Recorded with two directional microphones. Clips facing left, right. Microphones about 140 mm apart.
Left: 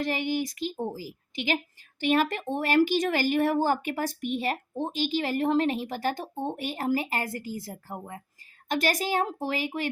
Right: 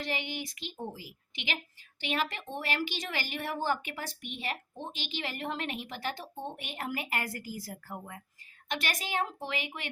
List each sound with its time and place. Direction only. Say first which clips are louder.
0.0 s speech: left 8 dB; 45° left (ahead or behind)